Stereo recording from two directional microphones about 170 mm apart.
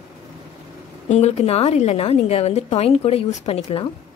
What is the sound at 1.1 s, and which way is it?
A woman's voice, 40° left (ahead or behind).